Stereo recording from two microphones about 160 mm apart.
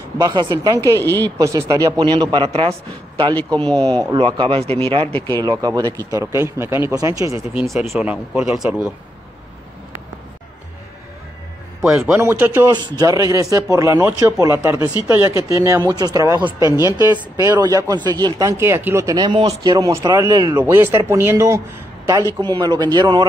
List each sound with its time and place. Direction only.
0.2 s speech: 25° right (ahead or behind)
0.9 s speech: 15° left (ahead or behind)
1.4 s speech: 20° right (ahead or behind); by 5.1 s 35° right (ahead or behind)
5.1 s speech: 15° left (ahead or behind)
5.4 s speech: 25° right (ahead or behind)
7.5 s speech: centre (ahead or behind)
11.8 s speech: 5° right (ahead or behind)
12.6 s speech: 25° right (ahead or behind)
20.6 s speech: 15° right (ahead or behind)
22.4 s speech: 25° right (ahead or behind)